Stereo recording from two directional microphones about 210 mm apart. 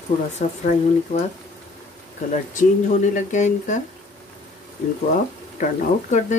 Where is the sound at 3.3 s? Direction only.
35° left (ahead or behind).